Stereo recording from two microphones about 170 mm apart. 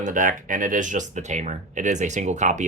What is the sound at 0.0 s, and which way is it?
Speech, 50° right (ahead or behind).